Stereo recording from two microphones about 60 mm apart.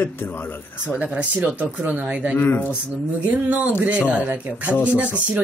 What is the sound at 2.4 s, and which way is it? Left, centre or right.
Speech, left.